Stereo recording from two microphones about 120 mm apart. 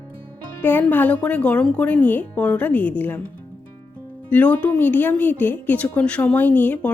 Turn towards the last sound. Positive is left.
turn(degrees=10)  # may be behind; listen again after turning